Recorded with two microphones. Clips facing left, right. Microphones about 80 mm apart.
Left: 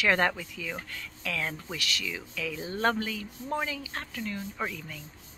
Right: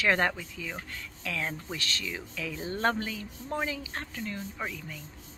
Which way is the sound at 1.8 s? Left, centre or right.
Right.